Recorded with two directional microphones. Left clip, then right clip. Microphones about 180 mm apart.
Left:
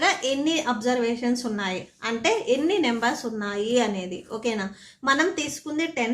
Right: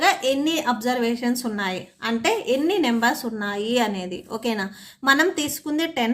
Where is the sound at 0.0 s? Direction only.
25° right (ahead or behind).